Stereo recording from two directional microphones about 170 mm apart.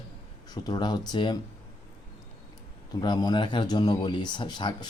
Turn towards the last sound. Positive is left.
turn(degrees=25)  # may be behind; listen again after turning